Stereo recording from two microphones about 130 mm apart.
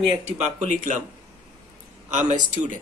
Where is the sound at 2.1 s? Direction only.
70° right (ahead or behind).